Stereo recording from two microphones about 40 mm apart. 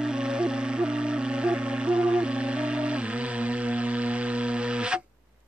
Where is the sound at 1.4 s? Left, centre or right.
Right.